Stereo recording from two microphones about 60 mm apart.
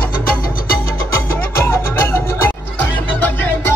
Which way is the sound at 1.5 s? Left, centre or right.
Left.